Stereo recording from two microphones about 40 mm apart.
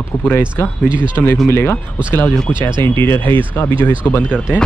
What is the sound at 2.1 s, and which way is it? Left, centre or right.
Speech, left.